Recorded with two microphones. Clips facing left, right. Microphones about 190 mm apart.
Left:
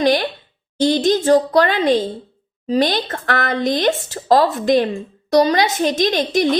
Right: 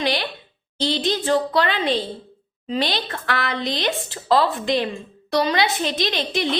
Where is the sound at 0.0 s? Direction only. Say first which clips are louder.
Left 7 dB; 45° left (ahead or behind).